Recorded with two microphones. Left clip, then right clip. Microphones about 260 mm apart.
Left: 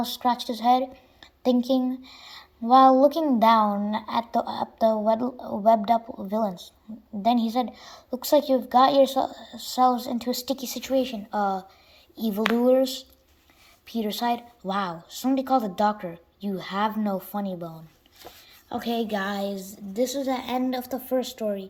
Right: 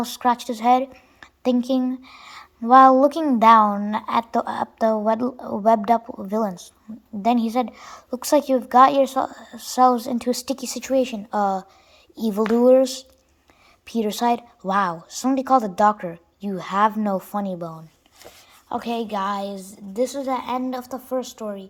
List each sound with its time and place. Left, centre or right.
0.0 s a woman's voice: centre
5.2 s a woman's voice: right
5.6 s a woman's voice: centre